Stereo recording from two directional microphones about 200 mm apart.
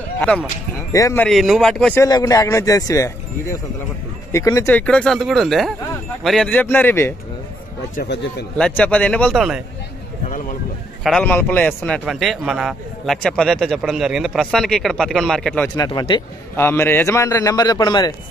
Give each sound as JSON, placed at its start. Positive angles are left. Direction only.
{"t": 0.9, "sound": "a man's voice", "side_deg": 15}
{"t": 1.2, "sound": "a man's voice", "side_deg": 0}
{"t": 2.0, "sound": "a man's voice", "side_deg": 20}
{"t": 8.5, "sound": "a man's voice", "side_deg": 5}
{"t": 11.1, "sound": "a man's voice", "side_deg": 5}
{"t": 15.7, "sound": "a man's voice", "side_deg": 20}